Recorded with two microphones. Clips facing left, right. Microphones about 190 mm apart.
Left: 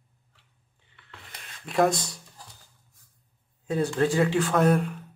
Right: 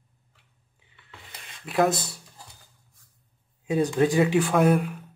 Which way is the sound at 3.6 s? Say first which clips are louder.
Right 2 dB; 15° right (ahead or behind).